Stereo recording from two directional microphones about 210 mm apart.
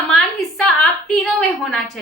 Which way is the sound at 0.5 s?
Centre (ahead or behind).